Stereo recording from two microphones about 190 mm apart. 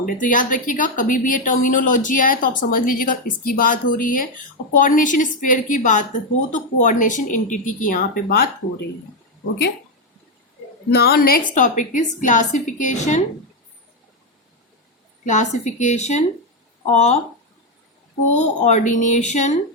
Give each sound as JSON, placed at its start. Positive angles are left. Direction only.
{"t": 0.0, "sound": "a woman's voice", "side_deg": 45}
{"t": 10.9, "sound": "a woman's voice", "side_deg": 55}
{"t": 15.2, "sound": "speech", "side_deg": 40}
{"t": 18.3, "sound": "speech", "side_deg": 35}